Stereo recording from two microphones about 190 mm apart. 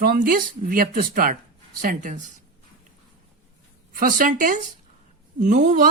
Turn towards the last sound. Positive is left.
turn(degrees=-45)  # may be behind; listen again after turning